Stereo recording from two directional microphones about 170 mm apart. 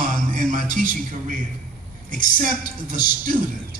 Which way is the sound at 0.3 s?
50° right (ahead or behind).